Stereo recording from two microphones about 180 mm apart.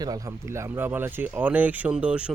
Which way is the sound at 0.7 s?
10° right (ahead or behind).